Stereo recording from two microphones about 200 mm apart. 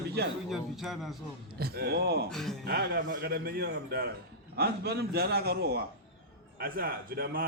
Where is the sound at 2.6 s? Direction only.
50° right (ahead or behind).